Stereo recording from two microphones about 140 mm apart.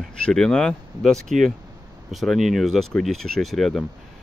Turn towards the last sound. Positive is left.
turn(degrees=0)  # may be behind; listen again after turning